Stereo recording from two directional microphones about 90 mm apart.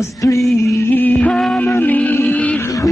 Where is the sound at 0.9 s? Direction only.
20° left (ahead or behind).